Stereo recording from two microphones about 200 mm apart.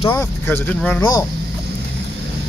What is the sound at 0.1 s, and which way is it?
Speech, 10° left (ahead or behind).